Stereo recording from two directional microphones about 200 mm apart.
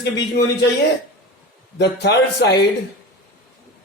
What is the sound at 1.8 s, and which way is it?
Speech, 55° left (ahead or behind).